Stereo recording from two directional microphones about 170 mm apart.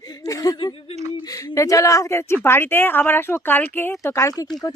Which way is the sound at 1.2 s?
20° left (ahead or behind).